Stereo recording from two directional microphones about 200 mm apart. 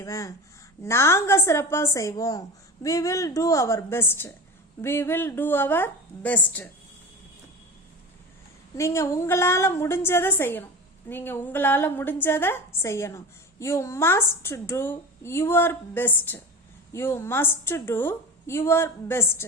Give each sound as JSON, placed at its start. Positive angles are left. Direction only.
{"t": 0.0, "sound": "a woman's voice", "side_deg": 15}
{"t": 8.7, "sound": "a woman's voice", "side_deg": 15}